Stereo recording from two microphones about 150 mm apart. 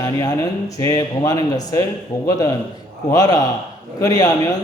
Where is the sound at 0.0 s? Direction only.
25° left (ahead or behind).